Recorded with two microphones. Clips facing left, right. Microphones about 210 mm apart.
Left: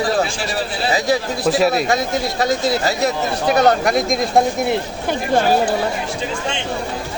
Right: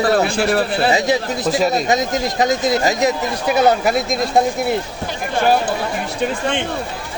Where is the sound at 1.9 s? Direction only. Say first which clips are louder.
Right 1 dB; 20° right (ahead or behind).